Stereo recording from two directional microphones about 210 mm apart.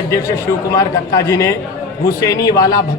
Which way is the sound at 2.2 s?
15° left (ahead or behind).